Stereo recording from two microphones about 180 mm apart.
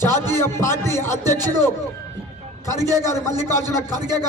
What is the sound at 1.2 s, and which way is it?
Speech, 20° right (ahead or behind).